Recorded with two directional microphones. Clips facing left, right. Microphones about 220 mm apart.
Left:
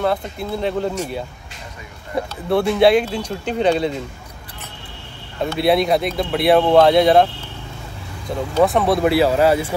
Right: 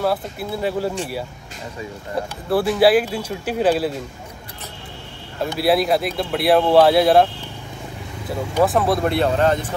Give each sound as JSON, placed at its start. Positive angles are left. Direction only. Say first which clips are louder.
{"t": 0.0, "sound": "speech", "louder": "left 1 dB", "side_deg": -5}
{"t": 2.5, "sound": "speech", "louder": "left 1 dB", "side_deg": -5}
{"t": 5.6, "sound": "speech", "louder": "left 1 dB", "side_deg": 0}
{"t": 8.3, "sound": "speech", "louder": "left 2 dB", "side_deg": 0}